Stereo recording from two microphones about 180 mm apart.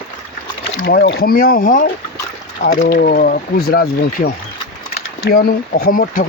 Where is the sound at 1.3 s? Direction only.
55° left (ahead or behind).